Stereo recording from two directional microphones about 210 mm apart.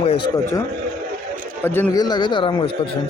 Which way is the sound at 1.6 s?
10° left (ahead or behind).